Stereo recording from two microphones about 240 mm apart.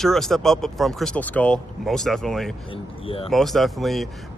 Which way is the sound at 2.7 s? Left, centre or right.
Left.